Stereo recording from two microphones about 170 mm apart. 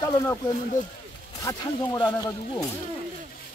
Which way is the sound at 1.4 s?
25° left (ahead or behind).